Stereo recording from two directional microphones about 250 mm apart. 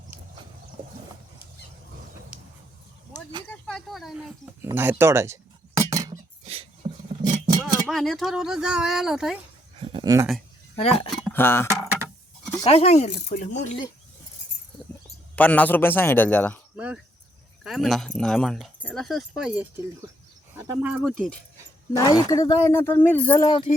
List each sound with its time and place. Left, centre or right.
3.4 s a sound: centre; by 7.6 s right
7.9 s speech: centre
9.8 s a sound: centre
10.8 s speech: left
11.3 s speech: centre
12.6 s speech: left
15.4 s speech: centre
16.7 s cricket: centre
17.6 s speech: centre
21.9 s speech: centre
23.5 s speech: centre